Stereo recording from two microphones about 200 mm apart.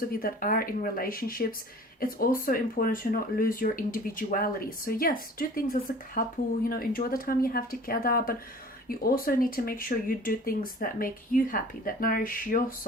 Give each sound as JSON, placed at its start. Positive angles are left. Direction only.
{"t": 0.2, "sound": "speech", "side_deg": 45}